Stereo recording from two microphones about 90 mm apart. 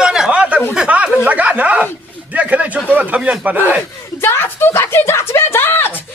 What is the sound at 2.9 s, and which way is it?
Speech, 15° right (ahead or behind).